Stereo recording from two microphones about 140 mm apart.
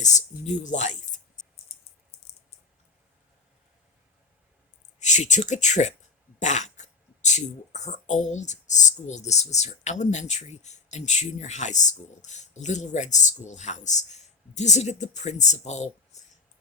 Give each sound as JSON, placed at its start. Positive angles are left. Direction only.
{"t": 0.0, "sound": "speech", "side_deg": 60}
{"t": 4.9, "sound": "speech", "side_deg": 55}